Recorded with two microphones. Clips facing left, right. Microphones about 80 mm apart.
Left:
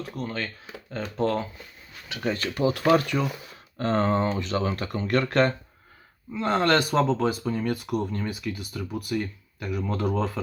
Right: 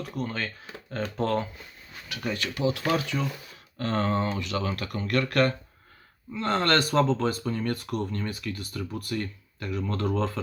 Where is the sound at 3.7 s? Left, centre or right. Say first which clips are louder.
Left 3 dB; left.